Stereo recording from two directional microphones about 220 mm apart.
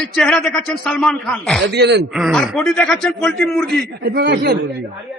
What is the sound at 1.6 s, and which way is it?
Speech, 50° right (ahead or behind).